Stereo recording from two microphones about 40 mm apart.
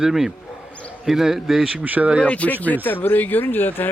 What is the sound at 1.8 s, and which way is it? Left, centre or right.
Speech, right.